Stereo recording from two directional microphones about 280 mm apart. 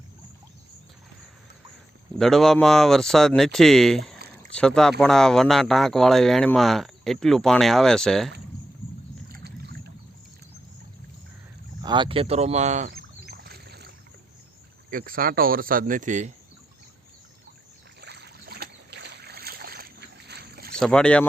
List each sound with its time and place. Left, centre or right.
2.1 s speech: centre
9.3 s boat: right
11.8 s rowboat: centre; by 13.9 s right
14.8 s speech: right
18.0 s boat: right
20.7 s speech: centre